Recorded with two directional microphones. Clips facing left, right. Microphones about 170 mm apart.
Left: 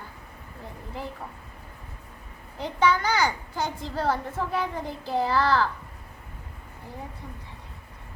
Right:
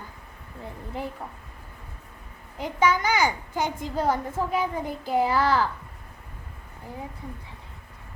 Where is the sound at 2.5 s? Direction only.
10° right (ahead or behind).